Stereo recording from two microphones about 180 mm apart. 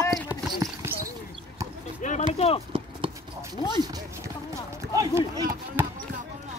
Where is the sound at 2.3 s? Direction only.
35° left (ahead or behind).